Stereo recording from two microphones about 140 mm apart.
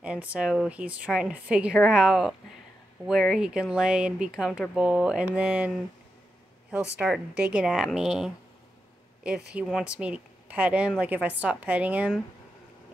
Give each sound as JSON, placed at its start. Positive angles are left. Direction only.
{"t": 0.0, "sound": "speech", "side_deg": -10}
{"t": 6.7, "sound": "speech", "side_deg": -5}